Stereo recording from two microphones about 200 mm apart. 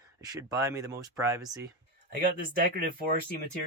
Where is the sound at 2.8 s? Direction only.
45° right (ahead or behind).